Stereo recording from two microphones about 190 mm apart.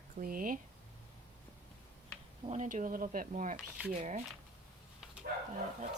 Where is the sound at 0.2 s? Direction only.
45° right (ahead or behind).